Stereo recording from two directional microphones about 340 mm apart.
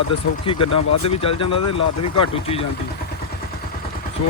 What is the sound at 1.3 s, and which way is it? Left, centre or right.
Speech, left.